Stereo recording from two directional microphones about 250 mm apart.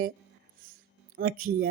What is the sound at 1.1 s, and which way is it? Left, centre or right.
Speech, right.